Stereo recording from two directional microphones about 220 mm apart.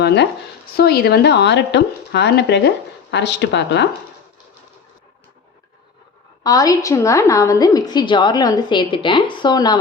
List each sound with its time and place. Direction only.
0.0 s speech: 50° left (ahead or behind)
6.4 s a woman's voice: 15° left (ahead or behind)